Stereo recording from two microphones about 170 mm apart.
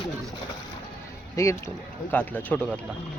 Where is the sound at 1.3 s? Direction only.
15° left (ahead or behind).